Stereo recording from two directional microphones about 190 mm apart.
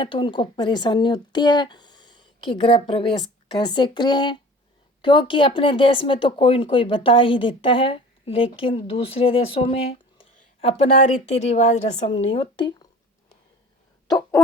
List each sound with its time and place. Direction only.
0.0 s a woman's voice: 25° left (ahead or behind)
12.1 s speech: 25° left (ahead or behind)
14.1 s chicken: 15° left (ahead or behind)